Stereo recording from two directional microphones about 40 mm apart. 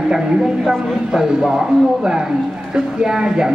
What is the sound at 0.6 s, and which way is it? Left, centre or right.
Speech, centre.